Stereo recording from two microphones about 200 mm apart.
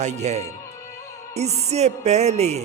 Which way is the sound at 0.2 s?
35° right (ahead or behind).